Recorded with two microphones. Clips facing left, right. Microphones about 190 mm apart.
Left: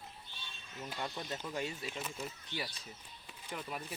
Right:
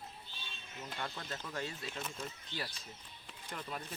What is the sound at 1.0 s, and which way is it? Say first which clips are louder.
Speech: left 3 dB; 15° left (ahead or behind).